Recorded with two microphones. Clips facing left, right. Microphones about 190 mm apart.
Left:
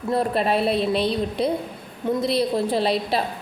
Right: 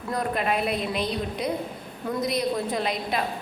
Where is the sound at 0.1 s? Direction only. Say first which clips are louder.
Left 5 dB; 30° left (ahead or behind).